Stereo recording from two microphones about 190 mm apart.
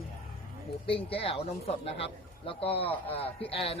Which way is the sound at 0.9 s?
30° left (ahead or behind).